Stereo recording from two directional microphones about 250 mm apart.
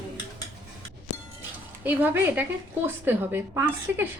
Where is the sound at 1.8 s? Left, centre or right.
Centre.